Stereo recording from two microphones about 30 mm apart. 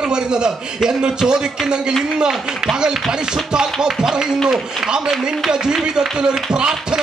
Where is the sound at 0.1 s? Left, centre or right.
Right.